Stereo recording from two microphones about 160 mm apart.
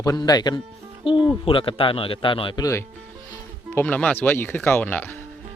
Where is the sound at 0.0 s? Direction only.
25° left (ahead or behind).